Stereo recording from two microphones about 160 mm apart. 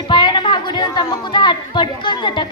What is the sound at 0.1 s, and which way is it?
Speech, 30° left (ahead or behind).